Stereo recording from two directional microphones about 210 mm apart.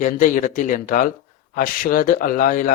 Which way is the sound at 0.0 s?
35° left (ahead or behind).